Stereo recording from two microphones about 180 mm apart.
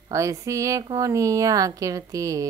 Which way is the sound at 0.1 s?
15° right (ahead or behind).